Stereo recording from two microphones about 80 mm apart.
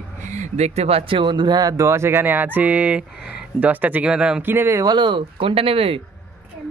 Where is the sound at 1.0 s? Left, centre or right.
Right.